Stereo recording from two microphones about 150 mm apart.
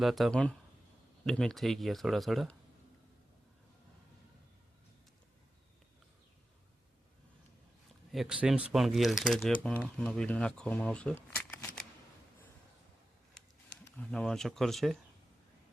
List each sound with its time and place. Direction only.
0.0 s speech: centre (ahead or behind)
8.1 s speech: 5° right (ahead or behind)
13.9 s speech: 5° left (ahead or behind)